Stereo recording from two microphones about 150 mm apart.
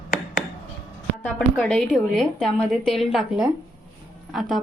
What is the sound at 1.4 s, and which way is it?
A woman's voice, 5° left (ahead or behind).